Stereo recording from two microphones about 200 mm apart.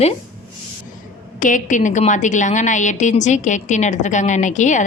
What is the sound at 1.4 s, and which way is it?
A woman's voice, 40° left (ahead or behind).